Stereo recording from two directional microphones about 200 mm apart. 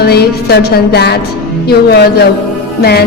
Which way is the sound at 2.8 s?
55° left (ahead or behind).